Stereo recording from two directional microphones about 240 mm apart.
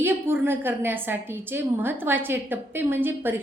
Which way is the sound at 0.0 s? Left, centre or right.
Centre.